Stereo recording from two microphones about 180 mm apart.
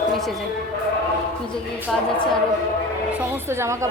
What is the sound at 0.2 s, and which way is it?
Speech, centre (ahead or behind).